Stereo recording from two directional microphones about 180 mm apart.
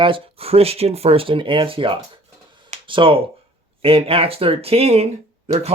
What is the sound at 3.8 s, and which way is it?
Speech, 30° right (ahead or behind).